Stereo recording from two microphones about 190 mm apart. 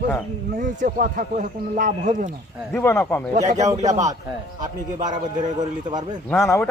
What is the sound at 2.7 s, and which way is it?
Speech, 10° left (ahead or behind).